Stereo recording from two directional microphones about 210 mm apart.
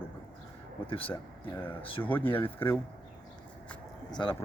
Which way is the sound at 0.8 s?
25° left (ahead or behind).